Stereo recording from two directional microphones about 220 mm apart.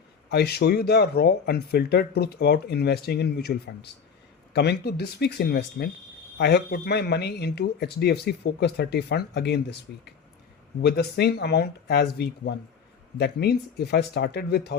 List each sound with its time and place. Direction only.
0.3 s speech: 45° left (ahead or behind)
10.8 s speech: 45° left (ahead or behind)